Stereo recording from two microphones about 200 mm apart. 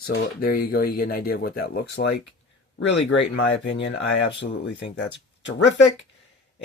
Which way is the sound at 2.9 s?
65° left (ahead or behind).